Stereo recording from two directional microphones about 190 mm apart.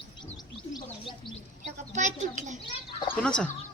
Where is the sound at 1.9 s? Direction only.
40° right (ahead or behind).